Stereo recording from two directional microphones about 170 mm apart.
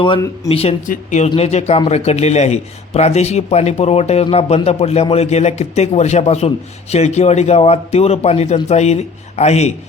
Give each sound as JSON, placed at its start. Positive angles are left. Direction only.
{"t": 0.4, "sound": "a man's voice", "side_deg": 35}